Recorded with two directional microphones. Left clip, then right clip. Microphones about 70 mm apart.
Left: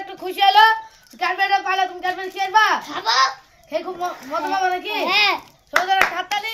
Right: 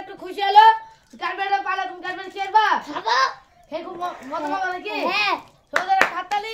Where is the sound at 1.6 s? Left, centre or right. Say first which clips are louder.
Left 5 dB; right.